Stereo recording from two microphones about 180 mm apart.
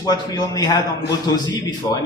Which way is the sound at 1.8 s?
20° left (ahead or behind).